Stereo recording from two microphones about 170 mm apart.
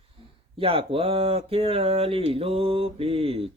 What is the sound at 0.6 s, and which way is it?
Speech, 35° right (ahead or behind).